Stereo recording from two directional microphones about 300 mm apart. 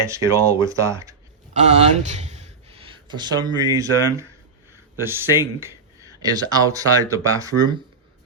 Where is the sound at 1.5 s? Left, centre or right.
Right.